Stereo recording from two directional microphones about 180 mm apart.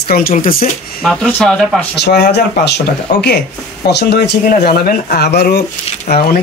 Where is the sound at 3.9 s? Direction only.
65° left (ahead or behind).